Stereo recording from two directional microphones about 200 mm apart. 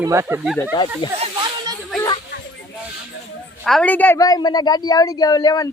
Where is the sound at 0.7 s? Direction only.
20° left (ahead or behind).